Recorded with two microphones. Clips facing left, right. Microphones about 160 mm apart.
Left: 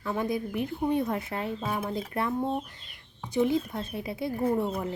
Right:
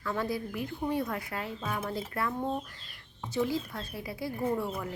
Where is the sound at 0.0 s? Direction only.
20° left (ahead or behind).